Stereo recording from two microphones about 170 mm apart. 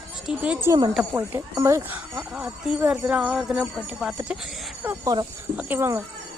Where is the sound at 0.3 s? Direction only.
5° right (ahead or behind).